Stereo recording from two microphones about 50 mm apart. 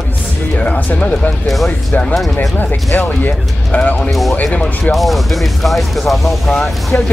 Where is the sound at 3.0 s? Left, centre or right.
Left.